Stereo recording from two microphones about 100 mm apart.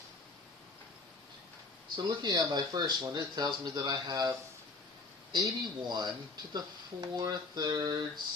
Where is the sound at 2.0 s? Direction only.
45° right (ahead or behind).